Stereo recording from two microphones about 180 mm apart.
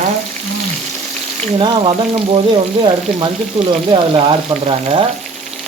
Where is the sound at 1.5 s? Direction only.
25° right (ahead or behind).